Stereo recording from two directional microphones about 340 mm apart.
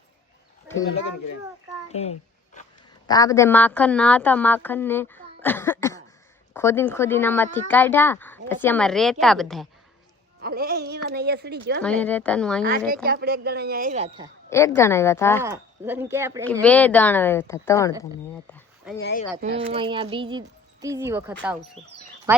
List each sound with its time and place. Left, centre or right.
1.9 s a woman's voice: centre
10.4 s a woman's voice: right
11.8 s a woman's voice: centre
12.9 s a woman's voice: right
14.5 s speech: centre
15.4 s speech: centre
16.6 s a woman's voice: centre
18.4 s a sound: centre
18.9 s speech: left
19.4 s a woman's voice: centre
22.3 s a sound: centre